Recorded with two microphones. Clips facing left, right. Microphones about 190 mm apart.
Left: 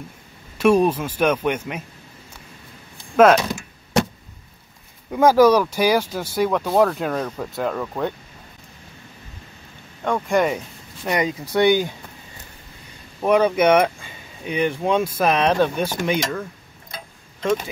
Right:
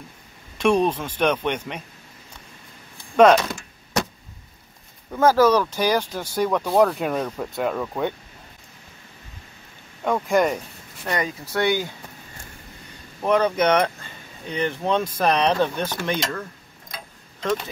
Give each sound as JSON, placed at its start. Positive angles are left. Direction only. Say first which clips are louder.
{"t": 0.6, "sound": "speech", "louder": "left 3 dB", "side_deg": 5}
{"t": 3.2, "sound": "speech", "louder": "left 1 dB", "side_deg": 5}
{"t": 5.1, "sound": "speech", "louder": "left 3 dB", "side_deg": 15}
{"t": 10.0, "sound": "speech", "louder": "even", "side_deg": 0}
{"t": 11.1, "sound": "speech", "louder": "left 4 dB", "side_deg": 15}
{"t": 13.2, "sound": "speech", "louder": "left 3 dB", "side_deg": 10}